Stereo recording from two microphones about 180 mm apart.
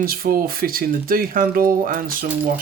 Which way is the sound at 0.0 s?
55° right (ahead or behind).